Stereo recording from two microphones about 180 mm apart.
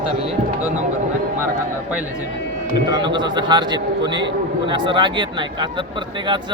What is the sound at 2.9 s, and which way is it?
Speech, 25° right (ahead or behind).